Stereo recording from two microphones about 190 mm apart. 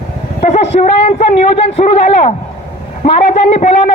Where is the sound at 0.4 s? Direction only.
35° left (ahead or behind).